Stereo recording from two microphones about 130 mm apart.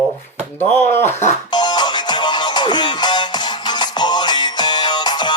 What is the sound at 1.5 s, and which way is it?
Music, 35° left (ahead or behind).